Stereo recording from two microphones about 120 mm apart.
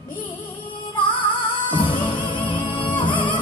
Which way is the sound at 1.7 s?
40° left (ahead or behind).